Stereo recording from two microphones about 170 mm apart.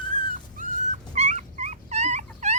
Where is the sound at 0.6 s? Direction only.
45° right (ahead or behind).